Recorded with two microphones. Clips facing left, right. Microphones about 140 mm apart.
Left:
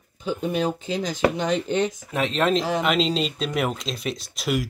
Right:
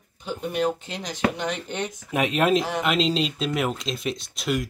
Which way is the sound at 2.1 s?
10° right (ahead or behind).